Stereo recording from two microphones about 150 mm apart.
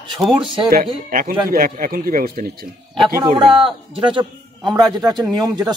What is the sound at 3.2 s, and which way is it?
A man's voice, 30° right (ahead or behind).